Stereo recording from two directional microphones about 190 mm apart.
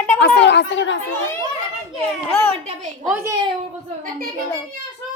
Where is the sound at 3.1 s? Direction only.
15° right (ahead or behind).